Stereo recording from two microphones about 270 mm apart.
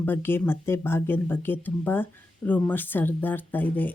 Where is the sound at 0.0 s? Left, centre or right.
Centre.